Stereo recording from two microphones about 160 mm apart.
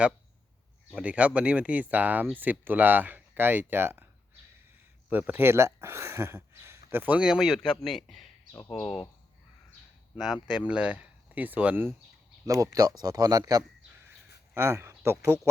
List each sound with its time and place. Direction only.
0.9 s speech: 10° right (ahead or behind)
10.2 s speech: centre (ahead or behind)